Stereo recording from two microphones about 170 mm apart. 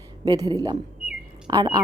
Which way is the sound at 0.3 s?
20° right (ahead or behind).